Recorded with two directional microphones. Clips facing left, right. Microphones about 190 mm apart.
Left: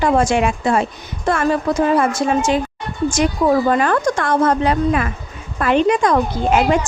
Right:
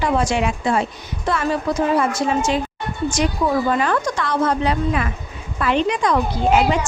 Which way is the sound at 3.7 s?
50° left (ahead or behind).